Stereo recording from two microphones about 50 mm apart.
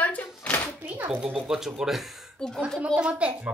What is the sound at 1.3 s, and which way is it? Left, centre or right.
Speech, centre.